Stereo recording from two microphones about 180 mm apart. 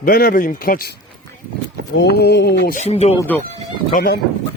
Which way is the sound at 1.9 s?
65° left (ahead or behind).